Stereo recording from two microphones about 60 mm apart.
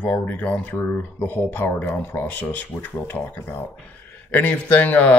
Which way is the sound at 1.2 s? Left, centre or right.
Left.